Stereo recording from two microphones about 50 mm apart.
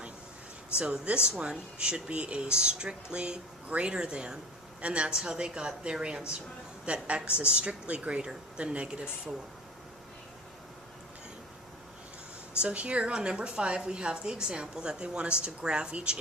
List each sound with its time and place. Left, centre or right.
0.8 s speech: right
12.6 s speech: right